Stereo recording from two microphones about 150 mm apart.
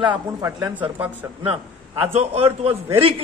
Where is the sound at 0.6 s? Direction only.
10° right (ahead or behind).